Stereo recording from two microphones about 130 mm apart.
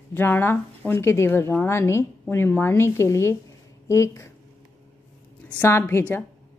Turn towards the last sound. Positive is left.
turn(degrees=15)  # may be behind; listen again after turning